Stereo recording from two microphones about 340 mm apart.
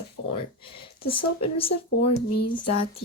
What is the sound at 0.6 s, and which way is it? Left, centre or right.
A woman's voice, centre.